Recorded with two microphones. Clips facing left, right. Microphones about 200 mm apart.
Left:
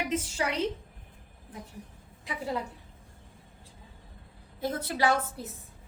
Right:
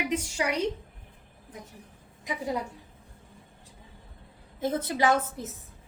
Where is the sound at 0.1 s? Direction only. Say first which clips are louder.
Right 2 dB; 15° right (ahead or behind).